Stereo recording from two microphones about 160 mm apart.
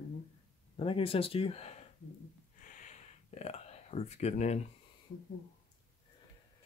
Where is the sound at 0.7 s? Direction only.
35° left (ahead or behind).